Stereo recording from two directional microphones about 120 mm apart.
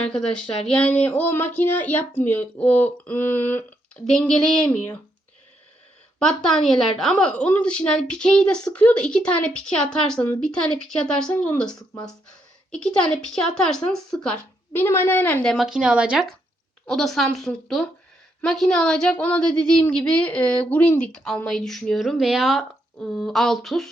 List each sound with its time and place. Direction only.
0.0 s speech: 5° left (ahead or behind)
6.1 s speech: 5° left (ahead or behind)
14.7 s speech: 15° left (ahead or behind)
15.4 s speech: centre (ahead or behind)
16.8 s speech: 5° left (ahead or behind)